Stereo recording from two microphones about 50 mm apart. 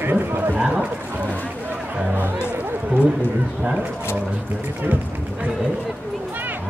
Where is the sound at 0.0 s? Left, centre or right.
Right.